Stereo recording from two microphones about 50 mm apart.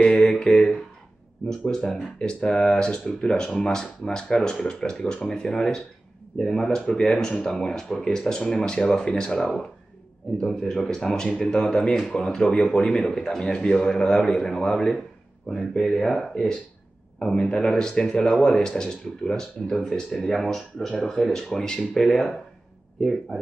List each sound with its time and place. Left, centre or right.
0.0 s mantra: centre
1.4 s speech: centre
2.1 s speech: centre